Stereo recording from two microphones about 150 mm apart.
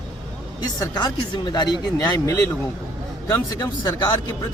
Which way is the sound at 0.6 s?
25° left (ahead or behind).